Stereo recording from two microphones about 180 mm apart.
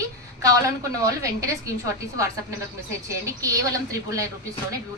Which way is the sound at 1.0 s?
15° right (ahead or behind).